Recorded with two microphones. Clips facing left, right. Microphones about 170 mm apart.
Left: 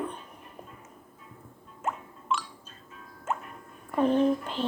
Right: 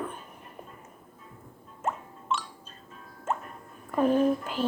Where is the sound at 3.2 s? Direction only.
35° right (ahead or behind).